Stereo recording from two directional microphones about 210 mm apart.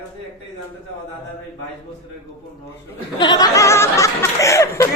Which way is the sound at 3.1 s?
20° left (ahead or behind).